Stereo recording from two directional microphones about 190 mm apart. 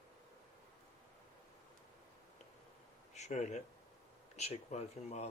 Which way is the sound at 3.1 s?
35° left (ahead or behind).